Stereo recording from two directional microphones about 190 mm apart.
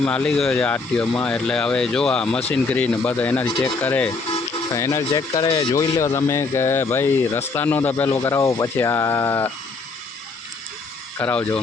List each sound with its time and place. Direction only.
0.0 s speech: 5° left (ahead or behind)
11.2 s speech: 10° left (ahead or behind)